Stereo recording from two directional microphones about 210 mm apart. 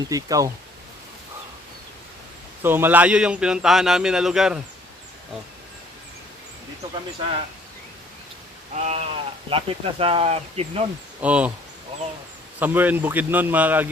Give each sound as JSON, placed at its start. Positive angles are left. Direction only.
{"t": 0.1, "sound": "speech", "side_deg": -15}
{"t": 2.6, "sound": "a man's voice", "side_deg": -10}
{"t": 8.7, "sound": "speech", "side_deg": -30}
{"t": 11.2, "sound": "speech", "side_deg": -5}
{"t": 12.5, "sound": "speech", "side_deg": -10}